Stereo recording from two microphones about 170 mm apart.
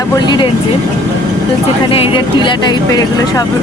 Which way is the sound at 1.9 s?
30° left (ahead or behind).